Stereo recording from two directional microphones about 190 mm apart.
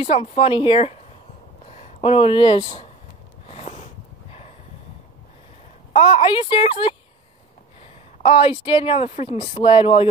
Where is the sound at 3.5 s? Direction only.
35° left (ahead or behind).